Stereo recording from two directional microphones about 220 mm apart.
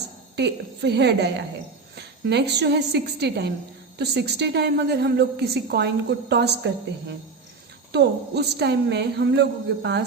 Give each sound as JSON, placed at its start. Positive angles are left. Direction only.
{"t": 0.3, "sound": "a woman's voice", "side_deg": -50}
{"t": 7.9, "sound": "a woman's voice", "side_deg": -50}